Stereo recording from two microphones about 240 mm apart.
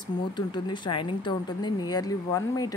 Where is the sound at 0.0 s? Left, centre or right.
Centre.